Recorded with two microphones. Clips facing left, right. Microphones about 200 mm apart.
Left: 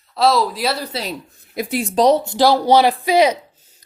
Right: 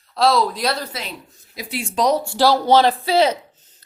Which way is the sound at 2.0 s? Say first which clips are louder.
Left 3 dB; 30° left (ahead or behind).